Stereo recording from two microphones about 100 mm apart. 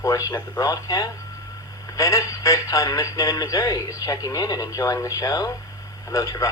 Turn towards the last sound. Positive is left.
turn(degrees=35)  # may be behind; listen again after turning